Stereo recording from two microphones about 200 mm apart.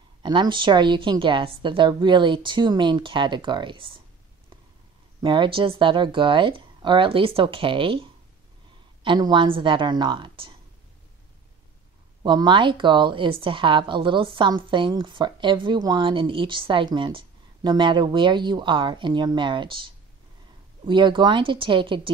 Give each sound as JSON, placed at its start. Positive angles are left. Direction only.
{"t": 0.2, "sound": "speech", "side_deg": -25}
{"t": 5.2, "sound": "speech", "side_deg": -25}
{"t": 12.2, "sound": "speech", "side_deg": -20}